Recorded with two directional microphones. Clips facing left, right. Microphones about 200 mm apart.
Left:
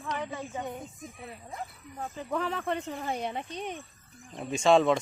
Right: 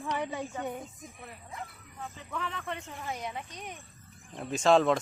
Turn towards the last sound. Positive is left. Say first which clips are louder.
# left 1 dB
turn(degrees=0)  # may be behind; listen again after turning